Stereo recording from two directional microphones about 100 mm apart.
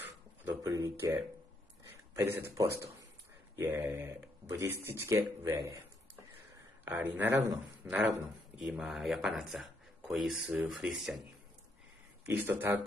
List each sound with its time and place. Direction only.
0.7 s a man's voice: 35° right (ahead or behind); by 11.1 s centre (ahead or behind)
12.3 s a man's voice: 20° right (ahead or behind)